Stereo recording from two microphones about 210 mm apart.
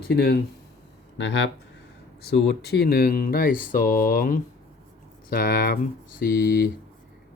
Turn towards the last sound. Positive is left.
turn(degrees=45)  # may be behind; listen again after turning